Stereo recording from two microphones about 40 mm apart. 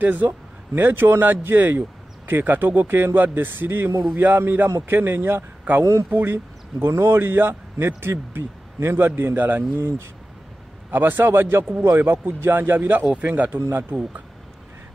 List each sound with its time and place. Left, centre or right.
0.0 s speech: right
0.7 s a man's voice: right
4.4 s speech: right
5.8 s speech: right
6.3 s speech: right
10.9 s a man's voice: right
11.8 s speech: right
12.7 s speech: right
13.5 s a man's voice: right